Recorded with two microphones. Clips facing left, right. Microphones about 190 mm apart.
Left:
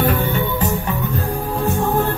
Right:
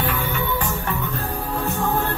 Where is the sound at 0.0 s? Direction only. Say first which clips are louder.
Left 6 dB; 40° left (ahead or behind).